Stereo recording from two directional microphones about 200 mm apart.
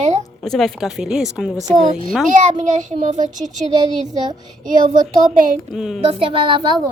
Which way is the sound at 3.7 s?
20° right (ahead or behind).